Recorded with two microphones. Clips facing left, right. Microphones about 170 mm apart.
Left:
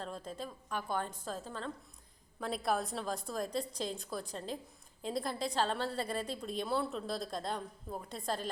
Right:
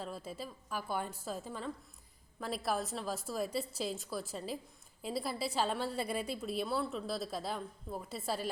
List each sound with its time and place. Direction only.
0.0 s a woman's voice: 5° right (ahead or behind)